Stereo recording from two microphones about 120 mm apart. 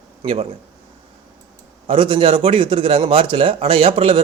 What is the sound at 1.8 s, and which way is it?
A man's voice, 45° right (ahead or behind).